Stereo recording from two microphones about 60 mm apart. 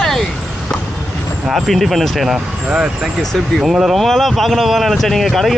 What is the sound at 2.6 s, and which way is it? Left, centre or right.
Speech, centre.